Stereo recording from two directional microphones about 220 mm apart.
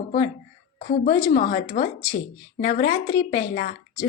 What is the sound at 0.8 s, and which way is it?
A woman's voice, 35° left (ahead or behind).